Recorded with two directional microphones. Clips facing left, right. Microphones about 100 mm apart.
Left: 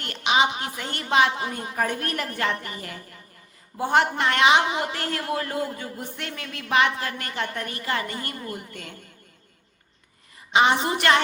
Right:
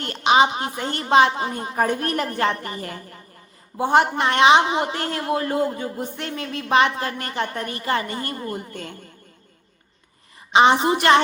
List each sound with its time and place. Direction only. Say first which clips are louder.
0.0 s a woman's voice: right 5 dB; 35° right (ahead or behind)
3.8 s a man's voice: right 3 dB; 20° right (ahead or behind)
10.5 s a man's voice: right 5 dB; 25° right (ahead or behind)